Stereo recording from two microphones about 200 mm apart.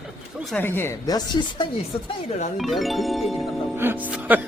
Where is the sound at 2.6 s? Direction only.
Centre (ahead or behind).